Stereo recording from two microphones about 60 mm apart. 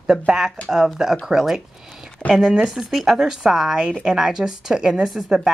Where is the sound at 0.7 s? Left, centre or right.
Centre.